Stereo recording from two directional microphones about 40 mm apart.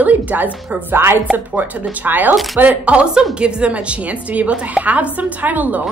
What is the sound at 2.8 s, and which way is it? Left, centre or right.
A woman's voice, right.